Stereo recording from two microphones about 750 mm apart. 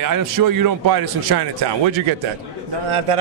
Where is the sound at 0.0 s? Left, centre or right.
Right.